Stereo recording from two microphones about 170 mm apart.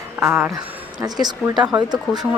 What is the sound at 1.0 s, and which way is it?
Speech, 25° right (ahead or behind).